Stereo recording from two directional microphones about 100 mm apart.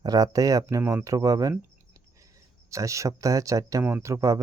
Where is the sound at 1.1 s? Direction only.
35° right (ahead or behind).